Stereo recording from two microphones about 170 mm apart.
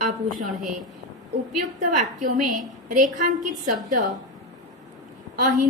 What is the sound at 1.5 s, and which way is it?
A woman's voice, 45° right (ahead or behind).